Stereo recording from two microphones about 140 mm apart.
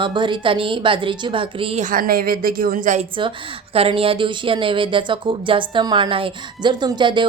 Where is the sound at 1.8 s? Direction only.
85° right.